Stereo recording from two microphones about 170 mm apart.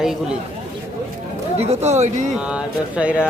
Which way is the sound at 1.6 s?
40° right (ahead or behind).